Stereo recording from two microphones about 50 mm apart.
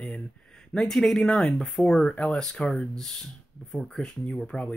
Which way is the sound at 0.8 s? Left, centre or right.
Centre.